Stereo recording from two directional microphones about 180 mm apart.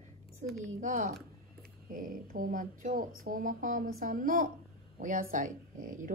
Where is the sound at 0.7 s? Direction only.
45° right (ahead or behind).